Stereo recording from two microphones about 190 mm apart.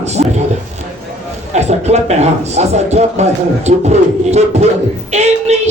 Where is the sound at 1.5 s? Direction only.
35° right (ahead or behind).